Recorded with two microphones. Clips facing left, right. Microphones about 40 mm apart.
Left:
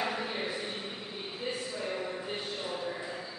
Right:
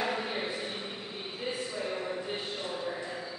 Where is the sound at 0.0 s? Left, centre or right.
Centre.